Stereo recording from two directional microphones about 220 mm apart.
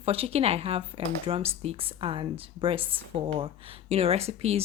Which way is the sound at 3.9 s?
30° right (ahead or behind).